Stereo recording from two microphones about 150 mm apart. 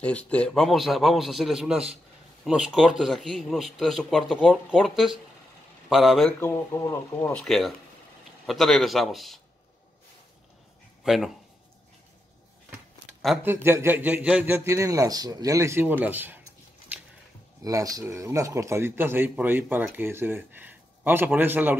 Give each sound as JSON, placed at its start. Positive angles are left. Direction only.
{"t": 0.0, "sound": "a man's voice", "side_deg": 10}
{"t": 6.4, "sound": "speech", "side_deg": 15}
{"t": 7.4, "sound": "a man's voice", "side_deg": 0}
{"t": 11.1, "sound": "a man's voice", "side_deg": 0}
{"t": 13.4, "sound": "speech", "side_deg": -15}
{"t": 17.6, "sound": "speech", "side_deg": -25}